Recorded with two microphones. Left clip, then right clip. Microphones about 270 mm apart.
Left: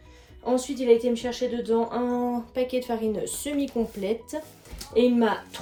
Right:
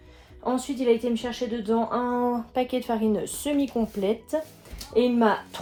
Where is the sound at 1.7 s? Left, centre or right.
Centre.